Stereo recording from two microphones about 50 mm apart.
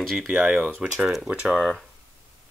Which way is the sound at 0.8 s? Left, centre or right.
Right.